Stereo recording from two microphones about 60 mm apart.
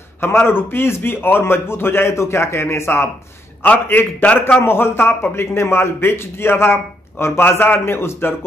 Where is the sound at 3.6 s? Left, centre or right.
Left.